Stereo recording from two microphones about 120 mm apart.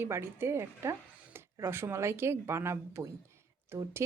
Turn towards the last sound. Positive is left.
turn(degrees=-20)  # may be behind; listen again after turning